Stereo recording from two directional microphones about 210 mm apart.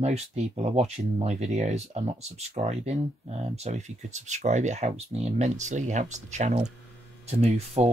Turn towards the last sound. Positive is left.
turn(degrees=-30)  # may be behind; listen again after turning